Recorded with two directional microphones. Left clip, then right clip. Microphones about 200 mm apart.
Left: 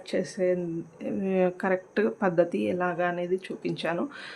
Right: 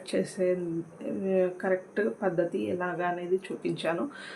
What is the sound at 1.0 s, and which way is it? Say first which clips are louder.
Speech: left 1 dB; 25° left (ahead or behind).